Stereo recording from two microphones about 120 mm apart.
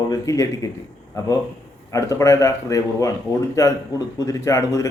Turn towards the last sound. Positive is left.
turn(degrees=25)  # may be behind; listen again after turning